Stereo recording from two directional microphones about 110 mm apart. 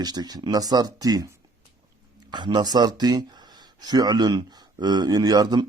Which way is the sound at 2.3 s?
45° right (ahead or behind).